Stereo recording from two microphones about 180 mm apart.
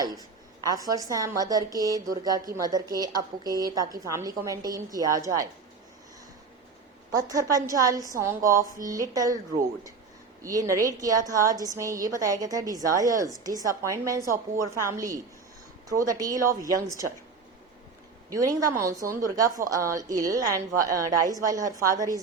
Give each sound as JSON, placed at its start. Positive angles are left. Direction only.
{"t": 0.6, "sound": "a woman's voice", "side_deg": -20}
{"t": 7.2, "sound": "a woman's voice", "side_deg": -20}
{"t": 10.4, "sound": "a woman's voice", "side_deg": -15}
{"t": 18.3, "sound": "a woman's voice", "side_deg": -20}